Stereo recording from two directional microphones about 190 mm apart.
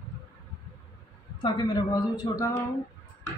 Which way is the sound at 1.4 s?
20° left (ahead or behind).